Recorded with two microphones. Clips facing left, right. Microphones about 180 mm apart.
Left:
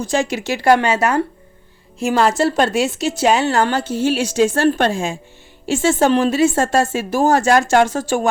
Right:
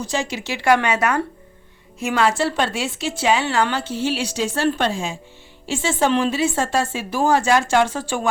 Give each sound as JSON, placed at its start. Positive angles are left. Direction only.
{"t": 0.0, "sound": "a woman's voice", "side_deg": 50}